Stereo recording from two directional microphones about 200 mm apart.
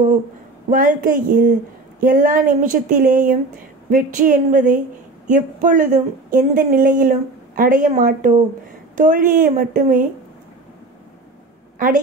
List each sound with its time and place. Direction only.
0.7 s a woman's voice: 45° right (ahead or behind)